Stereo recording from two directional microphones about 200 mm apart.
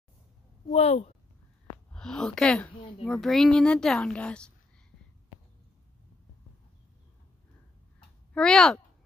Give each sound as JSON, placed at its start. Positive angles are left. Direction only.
{"t": 0.7, "sound": "speech", "side_deg": 30}
{"t": 1.9, "sound": "a woman's voice", "side_deg": 5}
{"t": 8.3, "sound": "speech", "side_deg": 5}